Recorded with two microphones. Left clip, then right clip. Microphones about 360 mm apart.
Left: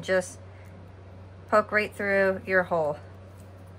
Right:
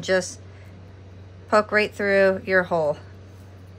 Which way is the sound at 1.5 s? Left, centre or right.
Centre.